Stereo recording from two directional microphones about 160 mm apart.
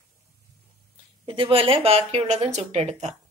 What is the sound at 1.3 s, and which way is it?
Speech, 35° right (ahead or behind).